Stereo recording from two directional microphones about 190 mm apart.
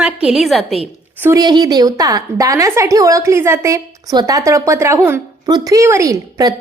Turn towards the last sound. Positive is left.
turn(degrees=-20)  # may be behind; listen again after turning